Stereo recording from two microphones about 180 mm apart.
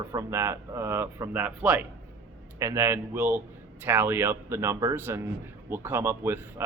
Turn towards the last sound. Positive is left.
turn(degrees=-15)  # may be behind; listen again after turning